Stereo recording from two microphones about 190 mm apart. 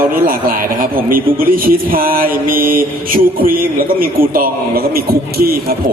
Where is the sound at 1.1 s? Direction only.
50° right (ahead or behind).